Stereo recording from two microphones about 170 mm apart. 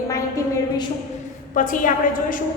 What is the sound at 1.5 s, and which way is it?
Speech, 50° left (ahead or behind).